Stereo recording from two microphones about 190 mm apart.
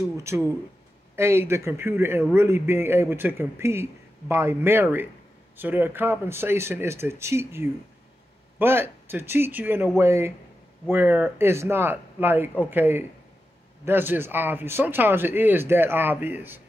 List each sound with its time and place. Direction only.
0.2 s a man's voice: 15° right (ahead or behind)